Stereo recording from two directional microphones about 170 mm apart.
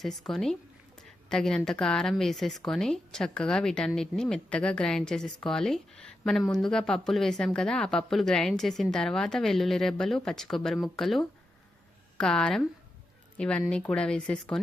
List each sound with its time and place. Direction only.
0.3 s a woman's voice: centre (ahead or behind)